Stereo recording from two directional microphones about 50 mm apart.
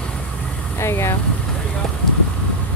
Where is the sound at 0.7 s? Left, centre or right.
Left.